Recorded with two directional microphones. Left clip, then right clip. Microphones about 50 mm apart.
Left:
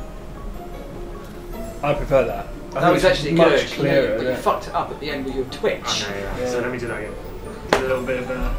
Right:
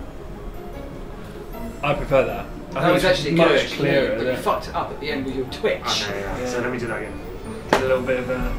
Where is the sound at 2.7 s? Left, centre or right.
Left.